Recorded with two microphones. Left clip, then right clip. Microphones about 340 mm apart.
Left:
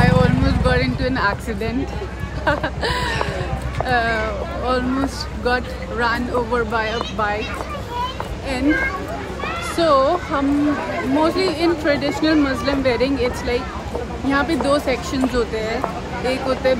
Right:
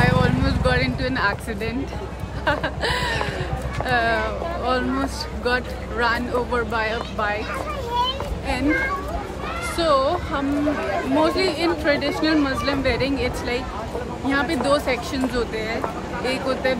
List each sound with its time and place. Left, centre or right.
0.0 s vehicle: centre
2.4 s a sound: centre
3.8 s speech: centre
9.8 s speech: centre